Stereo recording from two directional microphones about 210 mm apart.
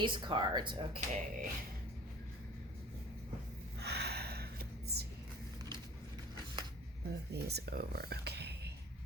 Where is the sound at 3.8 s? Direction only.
50° right (ahead or behind).